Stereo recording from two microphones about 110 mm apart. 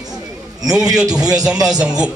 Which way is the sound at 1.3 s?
5° right (ahead or behind).